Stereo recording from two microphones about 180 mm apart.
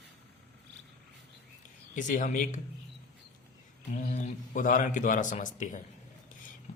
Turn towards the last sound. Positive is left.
turn(degrees=45)  # may be behind; listen again after turning